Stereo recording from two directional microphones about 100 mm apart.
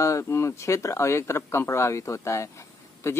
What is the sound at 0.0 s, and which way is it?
Speech, 30° left (ahead or behind).